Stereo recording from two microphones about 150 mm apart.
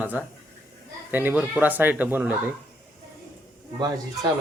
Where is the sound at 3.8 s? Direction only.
25° right (ahead or behind).